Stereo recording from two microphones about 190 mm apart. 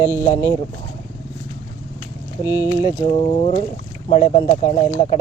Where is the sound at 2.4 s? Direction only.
20° left (ahead or behind).